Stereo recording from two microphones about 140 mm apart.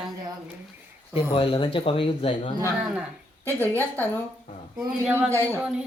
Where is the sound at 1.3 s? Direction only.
35° left (ahead or behind).